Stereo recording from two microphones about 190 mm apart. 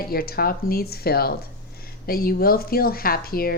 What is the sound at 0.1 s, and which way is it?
A woman's voice, 50° left (ahead or behind).